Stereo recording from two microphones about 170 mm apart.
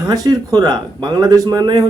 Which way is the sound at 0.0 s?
20° right (ahead or behind).